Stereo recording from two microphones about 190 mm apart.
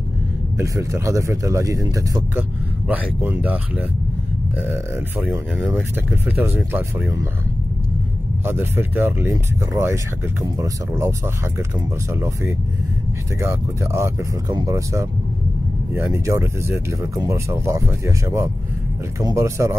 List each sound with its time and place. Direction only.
0.6 s speech: 15° right (ahead or behind)
8.5 s speech: 10° right (ahead or behind)